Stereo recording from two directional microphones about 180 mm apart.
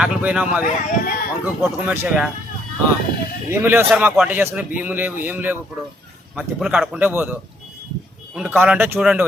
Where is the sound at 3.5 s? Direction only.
15° right (ahead or behind).